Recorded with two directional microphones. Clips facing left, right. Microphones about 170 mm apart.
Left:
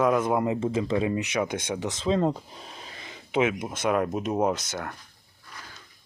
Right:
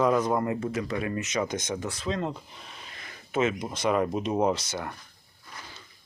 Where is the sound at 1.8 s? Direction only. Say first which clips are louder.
Left 11 dB; 30° left (ahead or behind).